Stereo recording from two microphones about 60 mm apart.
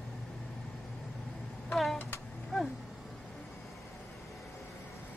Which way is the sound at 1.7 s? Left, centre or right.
Centre.